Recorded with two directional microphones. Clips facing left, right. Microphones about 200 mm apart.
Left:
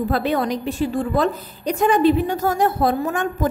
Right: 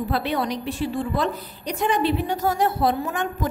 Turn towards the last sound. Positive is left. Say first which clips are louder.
# left 3 dB
turn(degrees=50)  # may be behind; listen again after turning